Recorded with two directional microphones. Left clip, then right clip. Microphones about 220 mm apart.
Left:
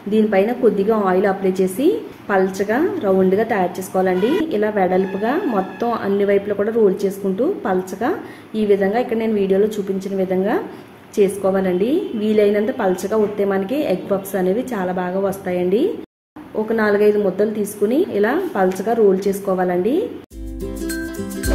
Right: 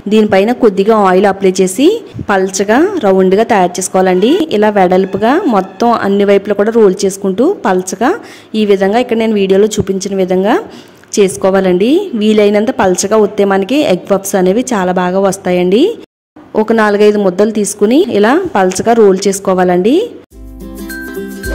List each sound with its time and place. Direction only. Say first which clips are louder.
0.1 s a woman's voice: right 7 dB; 45° right (ahead or behind)